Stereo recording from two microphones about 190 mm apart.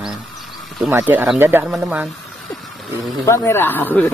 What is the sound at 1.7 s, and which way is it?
Speech, centre (ahead or behind).